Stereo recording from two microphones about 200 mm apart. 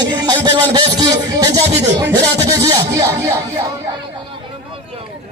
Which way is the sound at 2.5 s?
20° right (ahead or behind).